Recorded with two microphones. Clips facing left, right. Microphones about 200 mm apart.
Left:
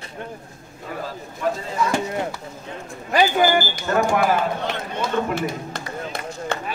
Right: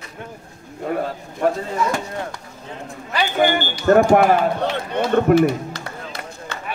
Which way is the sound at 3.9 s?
50° right (ahead or behind).